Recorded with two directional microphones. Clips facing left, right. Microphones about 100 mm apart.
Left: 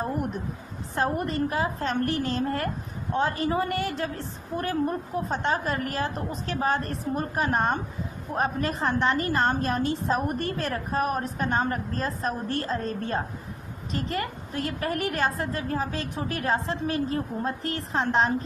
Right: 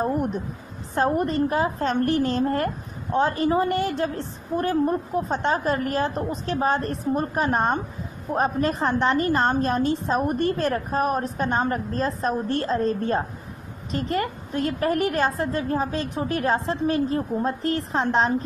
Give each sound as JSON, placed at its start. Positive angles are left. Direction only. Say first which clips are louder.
{"t": 0.9, "sound": "a woman's voice", "louder": "right 5 dB", "side_deg": -35}